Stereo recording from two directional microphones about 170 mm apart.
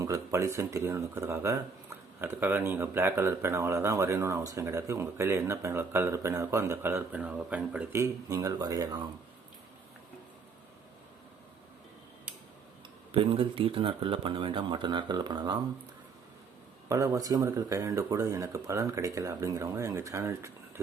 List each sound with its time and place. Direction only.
0.0 s speech: 15° right (ahead or behind)
13.1 s speech: 30° right (ahead or behind)
16.9 s speech: 20° right (ahead or behind)